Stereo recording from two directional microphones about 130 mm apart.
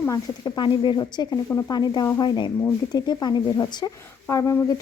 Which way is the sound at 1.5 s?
20° left (ahead or behind).